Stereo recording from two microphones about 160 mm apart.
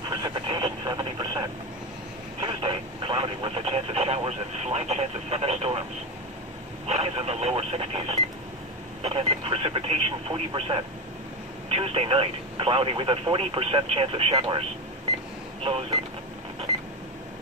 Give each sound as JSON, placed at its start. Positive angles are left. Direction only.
{"t": 0.1, "sound": "radio", "side_deg": -25}
{"t": 2.4, "sound": "radio", "side_deg": -30}
{"t": 6.9, "sound": "radio", "side_deg": -40}
{"t": 9.0, "sound": "telephone", "side_deg": -35}
{"t": 14.3, "sound": "speech", "side_deg": -35}
{"t": 15.6, "sound": "a sound", "side_deg": -35}